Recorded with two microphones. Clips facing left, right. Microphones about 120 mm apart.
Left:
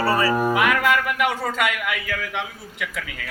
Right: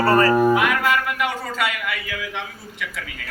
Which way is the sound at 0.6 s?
90° left.